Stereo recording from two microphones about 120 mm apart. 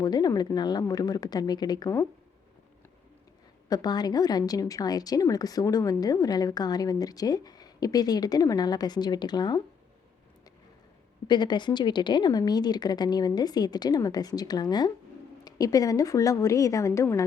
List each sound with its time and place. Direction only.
0.0 s a woman's voice: 35° left (ahead or behind)
3.7 s a woman's voice: 35° left (ahead or behind)
11.3 s a woman's voice: 40° left (ahead or behind)